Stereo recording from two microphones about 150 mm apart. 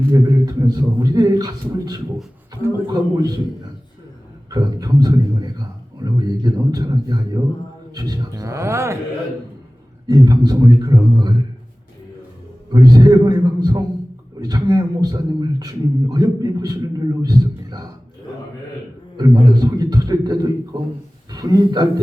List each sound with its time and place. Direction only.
0.1 s a man's voice: 25° right (ahead or behind)
4.4 s a man's voice: 25° right (ahead or behind)
10.1 s a man's voice: 25° right (ahead or behind)
12.7 s a man's voice: 25° right (ahead or behind)
19.1 s a man's voice: 30° right (ahead or behind)